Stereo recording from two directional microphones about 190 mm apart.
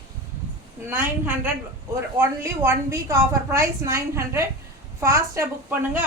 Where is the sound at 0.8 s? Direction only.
10° right (ahead or behind).